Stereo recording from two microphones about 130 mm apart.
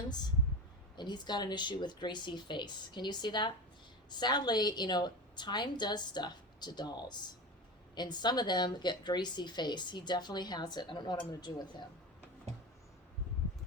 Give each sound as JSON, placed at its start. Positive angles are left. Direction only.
{"t": 0.9, "sound": "a woman's voice", "side_deg": 35}